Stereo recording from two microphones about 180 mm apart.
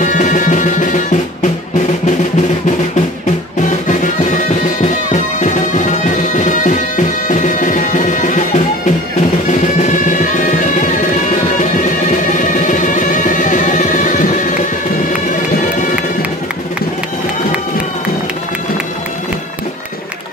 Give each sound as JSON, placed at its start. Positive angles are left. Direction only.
{"t": 0.0, "sound": "music", "side_deg": 45}
{"t": 4.7, "sound": "bagpipes", "side_deg": 45}
{"t": 9.5, "sound": "music", "side_deg": 40}
{"t": 12.4, "sound": "music", "side_deg": 45}